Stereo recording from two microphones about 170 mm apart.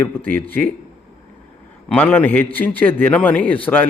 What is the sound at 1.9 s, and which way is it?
Speech, 10° left (ahead or behind).